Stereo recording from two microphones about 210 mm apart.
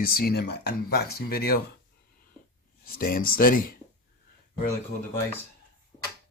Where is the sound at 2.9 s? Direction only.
45° left (ahead or behind).